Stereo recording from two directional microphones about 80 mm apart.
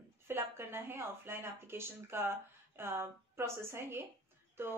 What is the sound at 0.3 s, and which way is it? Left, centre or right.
A woman's voice, right.